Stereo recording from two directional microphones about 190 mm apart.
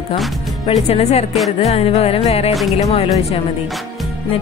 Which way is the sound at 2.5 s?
Centre (ahead or behind).